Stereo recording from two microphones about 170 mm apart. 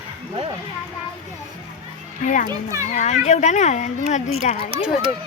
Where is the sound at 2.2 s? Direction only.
50° left (ahead or behind).